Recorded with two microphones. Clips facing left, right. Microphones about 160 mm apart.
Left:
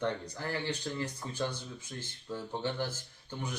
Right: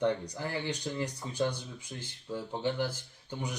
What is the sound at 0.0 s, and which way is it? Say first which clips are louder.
Speech: right 4 dB; 15° right (ahead or behind).